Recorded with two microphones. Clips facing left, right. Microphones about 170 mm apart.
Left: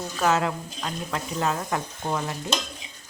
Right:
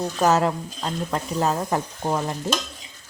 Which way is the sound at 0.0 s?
40° right (ahead or behind).